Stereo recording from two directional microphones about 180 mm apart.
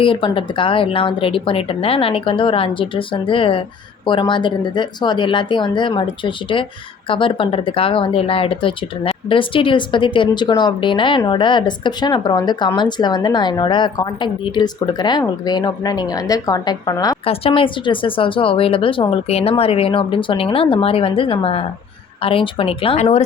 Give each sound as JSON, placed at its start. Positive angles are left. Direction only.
{"t": 0.0, "sound": "speech", "side_deg": 30}
{"t": 17.2, "sound": "speech", "side_deg": 30}